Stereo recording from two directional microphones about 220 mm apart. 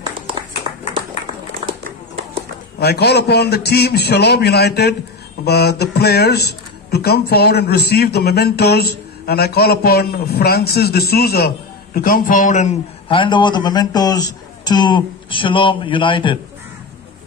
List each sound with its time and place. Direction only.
0.7 s a sound: 25° right (ahead or behind)
2.8 s speech: 45° left (ahead or behind)
13.1 s speech: 20° left (ahead or behind)